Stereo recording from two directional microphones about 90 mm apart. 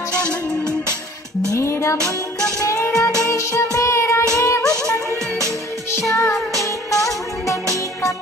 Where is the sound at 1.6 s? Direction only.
30° left (ahead or behind).